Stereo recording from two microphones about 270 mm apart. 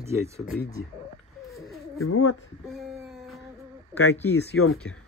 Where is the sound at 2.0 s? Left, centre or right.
Left.